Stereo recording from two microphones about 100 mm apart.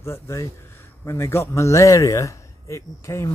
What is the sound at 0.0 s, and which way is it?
Speech, 30° left (ahead or behind).